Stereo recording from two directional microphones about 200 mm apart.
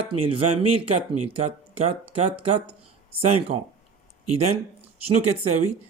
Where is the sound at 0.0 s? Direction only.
25° right (ahead or behind).